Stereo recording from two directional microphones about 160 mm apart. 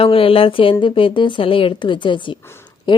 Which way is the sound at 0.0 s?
35° left (ahead or behind).